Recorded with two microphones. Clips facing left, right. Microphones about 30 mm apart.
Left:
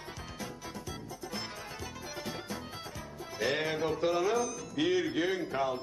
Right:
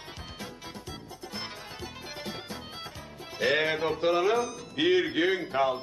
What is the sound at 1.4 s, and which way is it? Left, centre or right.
Music, right.